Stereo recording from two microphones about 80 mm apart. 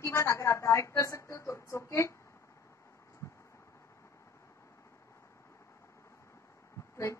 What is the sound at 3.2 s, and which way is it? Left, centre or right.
Vehicle, left.